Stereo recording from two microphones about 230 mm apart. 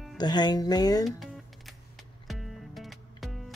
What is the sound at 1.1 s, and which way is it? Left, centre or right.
Music, centre.